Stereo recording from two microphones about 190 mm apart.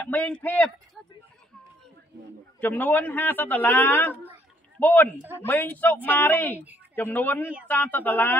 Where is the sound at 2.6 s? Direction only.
10° left (ahead or behind).